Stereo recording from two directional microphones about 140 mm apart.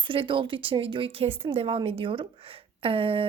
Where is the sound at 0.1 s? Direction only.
35° right (ahead or behind).